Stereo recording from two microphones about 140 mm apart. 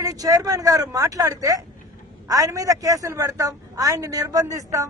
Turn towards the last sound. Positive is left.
turn(degrees=-25)  # may be behind; listen again after turning